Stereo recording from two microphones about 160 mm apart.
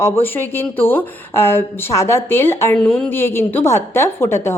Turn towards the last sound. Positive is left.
turn(degrees=15)  # may be behind; listen again after turning